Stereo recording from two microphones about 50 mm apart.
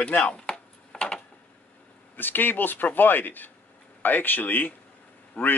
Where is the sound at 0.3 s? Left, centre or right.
Left.